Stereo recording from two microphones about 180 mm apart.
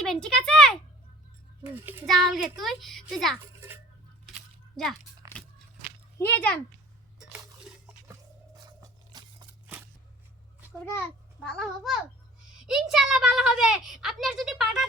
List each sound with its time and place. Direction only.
0.0 s a sound: 5° left (ahead or behind)
1.6 s child singing: 10° right (ahead or behind)
2.0 s a child's voice: centre (ahead or behind)
3.4 s a sound: 15° right (ahead or behind)
5.3 s biting: 10° left (ahead or behind)
6.1 s speech: 10° left (ahead or behind)
7.2 s dishes: 5° right (ahead or behind)
8.8 s a sound: 20° right (ahead or behind)
11.4 s a child's voice: centre (ahead or behind)